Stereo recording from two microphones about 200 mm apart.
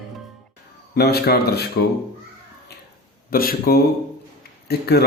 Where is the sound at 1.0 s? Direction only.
55° left (ahead or behind).